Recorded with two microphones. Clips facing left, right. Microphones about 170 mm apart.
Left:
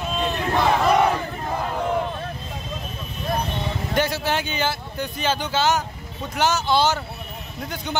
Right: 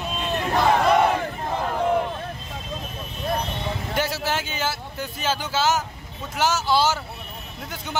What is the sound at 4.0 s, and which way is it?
Speech, 5° right (ahead or behind).